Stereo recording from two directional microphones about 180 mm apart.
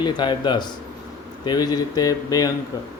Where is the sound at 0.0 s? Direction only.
25° left (ahead or behind).